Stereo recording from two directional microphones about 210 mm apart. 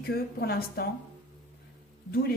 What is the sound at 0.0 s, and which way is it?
Speech, 45° left (ahead or behind).